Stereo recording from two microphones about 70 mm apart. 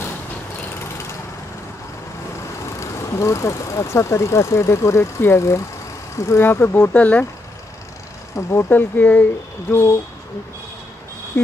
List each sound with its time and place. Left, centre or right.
2.8 s speech: left
6.4 s speech: left
8.4 s speech: left
8.6 s speech: left
11.4 s speech: left